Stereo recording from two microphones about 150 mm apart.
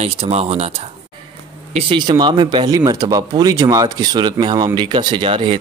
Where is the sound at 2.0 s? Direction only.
30° right (ahead or behind).